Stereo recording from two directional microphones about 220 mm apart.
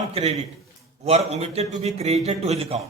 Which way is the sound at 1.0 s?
30° right (ahead or behind).